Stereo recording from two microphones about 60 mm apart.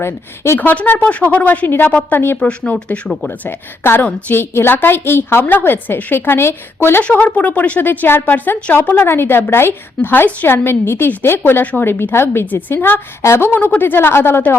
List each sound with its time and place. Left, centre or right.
0.0 s speech: left
0.6 s a woman's voice: left
2.4 s speech: left
3.8 s a woman's voice: left
7.0 s a woman's voice: left
11.6 s speech: left
11.9 s a woman's voice: left